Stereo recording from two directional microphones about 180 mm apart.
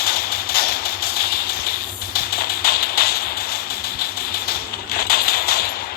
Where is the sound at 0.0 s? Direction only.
60° left (ahead or behind).